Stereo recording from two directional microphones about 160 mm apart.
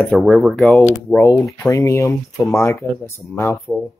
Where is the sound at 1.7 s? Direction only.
20° left (ahead or behind).